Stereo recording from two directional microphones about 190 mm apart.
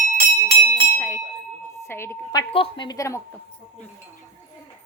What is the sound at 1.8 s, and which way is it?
Speech, 15° left (ahead or behind).